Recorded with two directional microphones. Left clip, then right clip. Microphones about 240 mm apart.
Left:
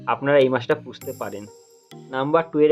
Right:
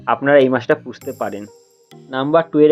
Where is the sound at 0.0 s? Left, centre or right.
Centre.